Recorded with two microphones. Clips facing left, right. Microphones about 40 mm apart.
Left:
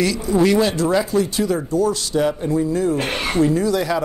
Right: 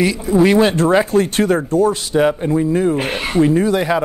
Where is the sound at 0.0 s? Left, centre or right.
Right.